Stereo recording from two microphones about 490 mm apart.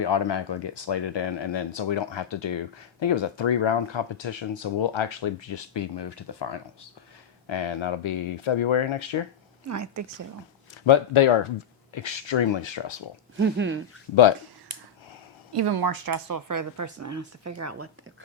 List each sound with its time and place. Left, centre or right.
0.0 s speech: left
9.6 s a woman's voice: right
10.8 s speech: left
12.0 s speech: left
13.3 s speech: right
15.5 s a woman's voice: right